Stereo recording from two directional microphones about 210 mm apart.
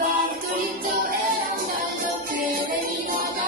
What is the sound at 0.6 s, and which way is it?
Music, 40° right (ahead or behind).